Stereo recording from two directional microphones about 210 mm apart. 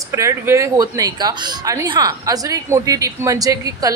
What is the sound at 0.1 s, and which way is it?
Speech, 15° right (ahead or behind).